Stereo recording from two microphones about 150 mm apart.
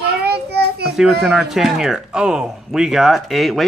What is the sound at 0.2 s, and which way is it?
Child singing, 90° right.